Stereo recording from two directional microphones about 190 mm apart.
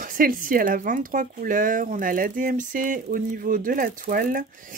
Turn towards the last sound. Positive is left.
turn(degrees=-45)  # may be behind; listen again after turning